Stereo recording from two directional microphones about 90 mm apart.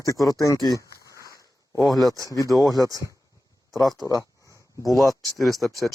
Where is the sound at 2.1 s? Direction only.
40° right (ahead or behind).